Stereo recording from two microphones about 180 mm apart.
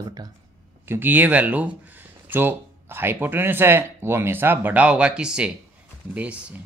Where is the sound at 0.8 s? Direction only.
10° right (ahead or behind).